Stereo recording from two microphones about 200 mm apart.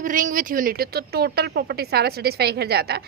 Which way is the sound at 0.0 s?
40° right (ahead or behind).